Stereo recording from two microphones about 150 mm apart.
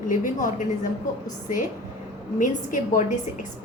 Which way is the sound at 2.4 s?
60° left (ahead or behind).